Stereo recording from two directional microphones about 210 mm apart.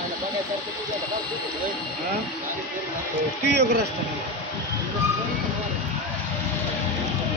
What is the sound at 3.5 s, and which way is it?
Speech, 50° right (ahead or behind).